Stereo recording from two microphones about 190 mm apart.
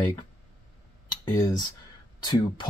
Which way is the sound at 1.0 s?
25° left (ahead or behind).